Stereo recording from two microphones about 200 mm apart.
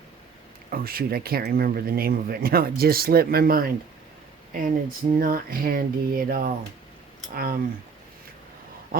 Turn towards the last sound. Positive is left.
turn(degrees=-50)  # may be behind; listen again after turning